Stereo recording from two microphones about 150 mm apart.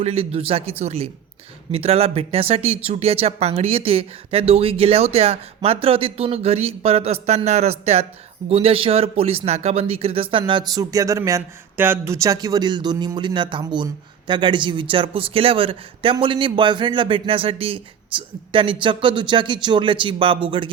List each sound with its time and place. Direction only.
0.0 s speech: 40° right (ahead or behind)